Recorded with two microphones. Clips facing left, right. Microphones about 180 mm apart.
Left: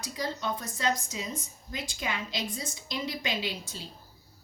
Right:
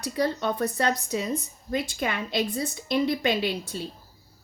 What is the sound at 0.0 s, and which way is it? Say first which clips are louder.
A woman's voice: right 8 dB; 60° right (ahead or behind).